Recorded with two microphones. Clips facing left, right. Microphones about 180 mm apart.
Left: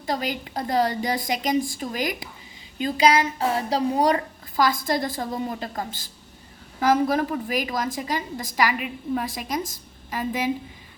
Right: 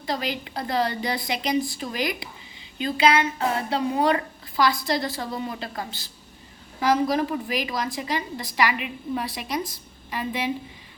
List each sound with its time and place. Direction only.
0.0 s a woman's voice: 45° left (ahead or behind)